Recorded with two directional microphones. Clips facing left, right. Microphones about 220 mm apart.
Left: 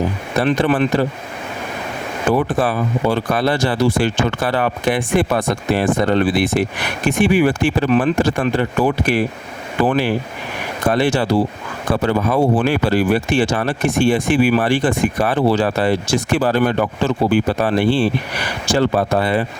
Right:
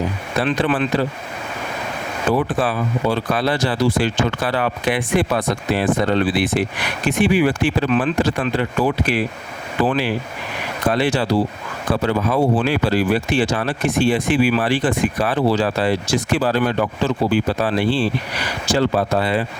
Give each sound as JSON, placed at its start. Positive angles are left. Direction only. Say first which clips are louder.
{"t": 0.4, "sound": "speech", "louder": "left 3 dB", "side_deg": 45}
{"t": 2.3, "sound": "speech", "louder": "left 2 dB", "side_deg": 45}